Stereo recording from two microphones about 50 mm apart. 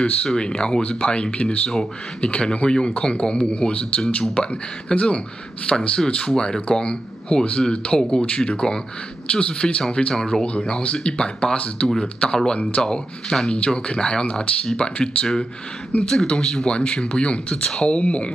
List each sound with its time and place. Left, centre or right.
0.0 s speech: centre